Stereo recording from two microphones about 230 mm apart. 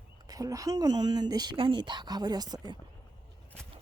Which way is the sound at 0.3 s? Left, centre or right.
Centre.